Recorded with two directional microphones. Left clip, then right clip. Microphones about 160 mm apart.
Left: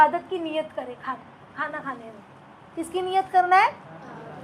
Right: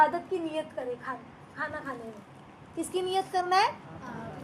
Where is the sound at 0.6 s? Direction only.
35° left (ahead or behind).